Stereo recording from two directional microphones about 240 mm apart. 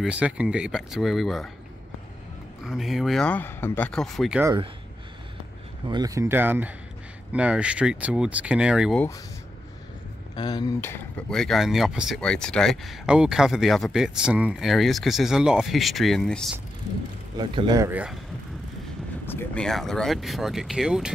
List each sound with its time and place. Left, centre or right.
0.0 s speech: centre
2.6 s speech: centre
5.9 s speech: centre
10.3 s speech: centre
17.4 s speech: centre
19.2 s speech: centre